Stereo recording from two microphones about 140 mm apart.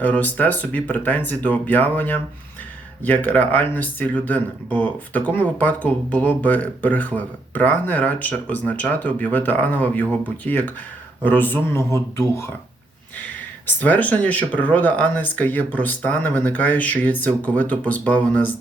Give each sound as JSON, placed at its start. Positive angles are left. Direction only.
{"t": 0.0, "sound": "speech", "side_deg": 10}